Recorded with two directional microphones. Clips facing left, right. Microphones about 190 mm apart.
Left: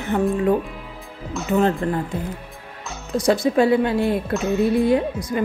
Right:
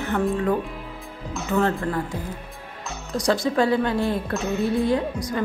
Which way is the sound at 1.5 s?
20° left (ahead or behind).